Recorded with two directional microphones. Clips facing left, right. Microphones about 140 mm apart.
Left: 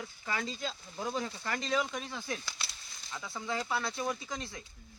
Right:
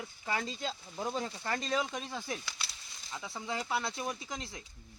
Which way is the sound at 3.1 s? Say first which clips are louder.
Left 1 dB; 15° right (ahead or behind).